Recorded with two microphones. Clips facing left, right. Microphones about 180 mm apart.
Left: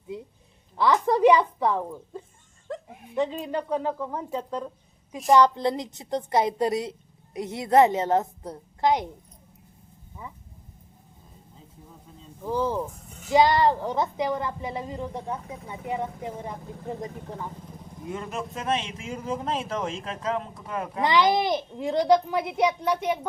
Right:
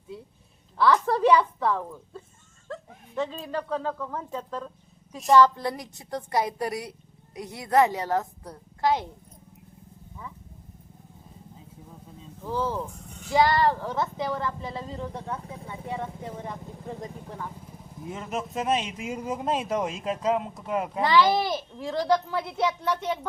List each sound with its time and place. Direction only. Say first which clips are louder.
0.8 s a woman's voice: left 1 dB; 15° left (ahead or behind)
12.4 s speech: left 3 dB; 15° left (ahead or behind)
18.1 s speech: even; 5° right (ahead or behind)
21.0 s speech: even; 20° left (ahead or behind)